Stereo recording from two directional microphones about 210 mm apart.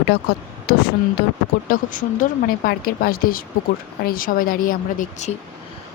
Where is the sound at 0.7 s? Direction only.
50° left (ahead or behind).